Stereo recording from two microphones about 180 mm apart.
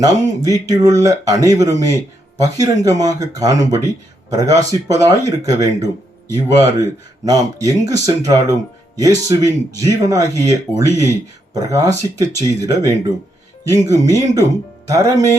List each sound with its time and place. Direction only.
0.0 s speech: 20° right (ahead or behind)